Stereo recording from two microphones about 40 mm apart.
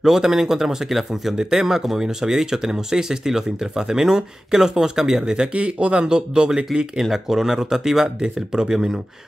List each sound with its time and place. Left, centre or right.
0.0 s speech: centre
7.0 s speech: centre